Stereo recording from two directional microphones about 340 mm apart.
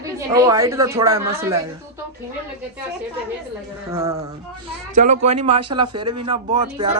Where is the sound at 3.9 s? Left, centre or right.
Centre.